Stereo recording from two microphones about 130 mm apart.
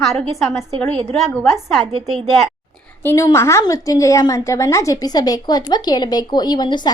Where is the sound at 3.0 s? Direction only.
15° left (ahead or behind).